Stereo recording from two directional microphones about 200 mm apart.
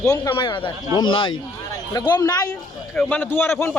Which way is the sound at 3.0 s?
10° left (ahead or behind).